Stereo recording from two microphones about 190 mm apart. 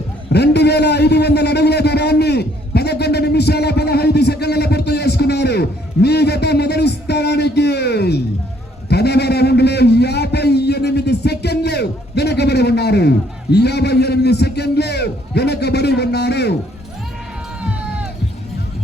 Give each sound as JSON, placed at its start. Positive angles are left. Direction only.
{"t": 0.3, "sound": "a man's voice", "side_deg": 60}
{"t": 8.9, "sound": "a sound", "side_deg": 60}
{"t": 17.6, "sound": "run", "side_deg": -5}